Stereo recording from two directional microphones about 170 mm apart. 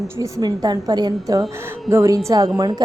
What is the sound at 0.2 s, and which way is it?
A woman's voice, 20° right (ahead or behind).